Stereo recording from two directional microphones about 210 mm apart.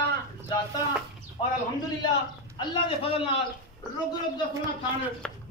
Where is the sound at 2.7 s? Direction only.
25° left (ahead or behind).